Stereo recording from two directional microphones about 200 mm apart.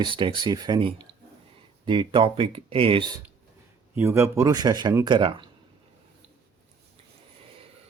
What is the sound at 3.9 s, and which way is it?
Speech, 10° right (ahead or behind).